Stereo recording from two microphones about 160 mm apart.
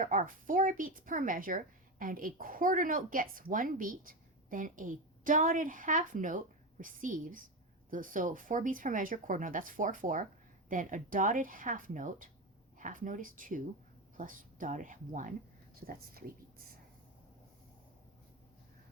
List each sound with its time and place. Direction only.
0.0 s speech: 55° right (ahead or behind)
15.9 s speech: 65° right (ahead or behind)